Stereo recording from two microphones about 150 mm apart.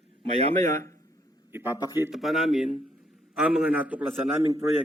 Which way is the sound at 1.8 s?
25° left (ahead or behind).